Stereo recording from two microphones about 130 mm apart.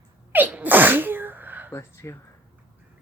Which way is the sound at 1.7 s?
20° left (ahead or behind).